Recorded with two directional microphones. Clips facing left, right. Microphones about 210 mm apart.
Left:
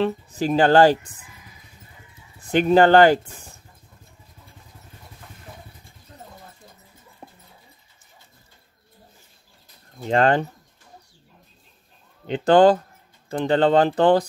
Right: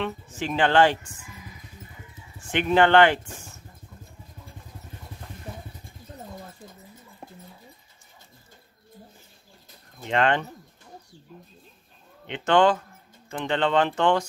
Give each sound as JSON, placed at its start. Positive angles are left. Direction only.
{"t": 0.0, "sound": "speech", "side_deg": 35}
{"t": 2.3, "sound": "speech", "side_deg": 35}
{"t": 7.2, "sound": "a sound", "side_deg": -5}
{"t": 10.0, "sound": "speech", "side_deg": 40}
{"t": 12.3, "sound": "speech", "side_deg": 35}